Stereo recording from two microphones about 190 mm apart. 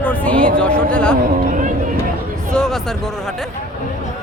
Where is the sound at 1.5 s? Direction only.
45° right (ahead or behind).